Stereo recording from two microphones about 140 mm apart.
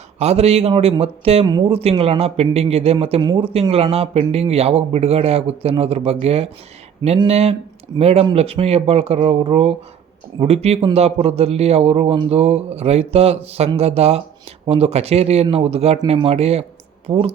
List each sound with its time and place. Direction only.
0.2 s a man's voice: 50° right (ahead or behind)